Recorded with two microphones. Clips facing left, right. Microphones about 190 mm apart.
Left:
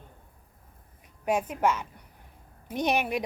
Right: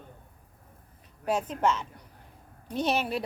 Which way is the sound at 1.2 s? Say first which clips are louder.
Left 1 dB; 10° left (ahead or behind).